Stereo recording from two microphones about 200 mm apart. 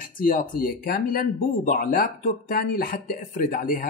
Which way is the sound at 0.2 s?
45° left (ahead or behind).